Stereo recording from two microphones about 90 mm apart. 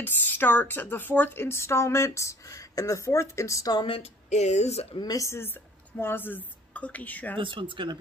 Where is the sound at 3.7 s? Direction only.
80° left.